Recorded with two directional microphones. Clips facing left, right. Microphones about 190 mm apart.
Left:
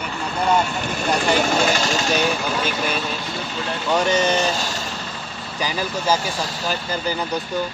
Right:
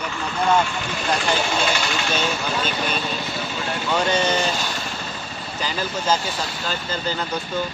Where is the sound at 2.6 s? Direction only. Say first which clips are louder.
Left 2 dB; 5° left (ahead or behind).